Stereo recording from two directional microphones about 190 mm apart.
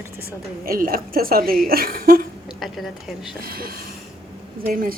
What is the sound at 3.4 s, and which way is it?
A woman's voice, 50° right (ahead or behind).